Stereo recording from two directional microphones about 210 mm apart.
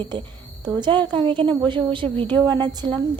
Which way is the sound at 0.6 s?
20° right (ahead or behind).